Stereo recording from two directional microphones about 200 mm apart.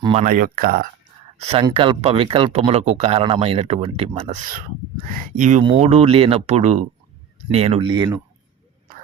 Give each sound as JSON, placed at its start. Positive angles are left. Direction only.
{"t": 0.0, "sound": "speech", "side_deg": -30}
{"t": 0.3, "sound": "speech", "side_deg": -45}
{"t": 1.5, "sound": "speech", "side_deg": -30}